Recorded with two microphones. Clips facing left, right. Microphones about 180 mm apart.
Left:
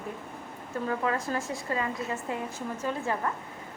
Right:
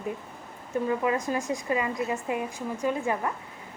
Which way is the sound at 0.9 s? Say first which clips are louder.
Right 2 dB; 15° right (ahead or behind).